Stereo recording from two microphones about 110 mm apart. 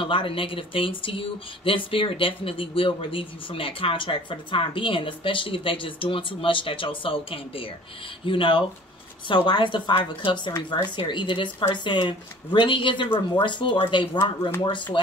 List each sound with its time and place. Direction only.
0.0 s speech: 55° left (ahead or behind)